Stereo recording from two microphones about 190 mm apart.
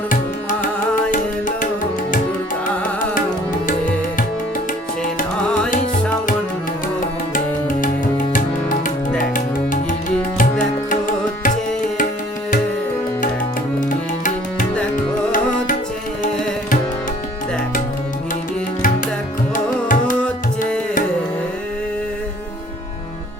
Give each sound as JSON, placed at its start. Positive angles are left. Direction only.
{"t": 1.1, "sound": "music", "side_deg": 45}
{"t": 10.3, "sound": "music", "side_deg": 45}
{"t": 19.5, "sound": "tabla", "side_deg": 45}